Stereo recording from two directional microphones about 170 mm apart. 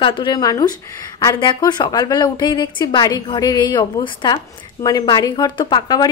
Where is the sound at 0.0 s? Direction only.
30° left (ahead or behind).